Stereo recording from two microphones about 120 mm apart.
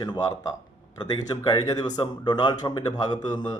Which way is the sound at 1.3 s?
35° left (ahead or behind).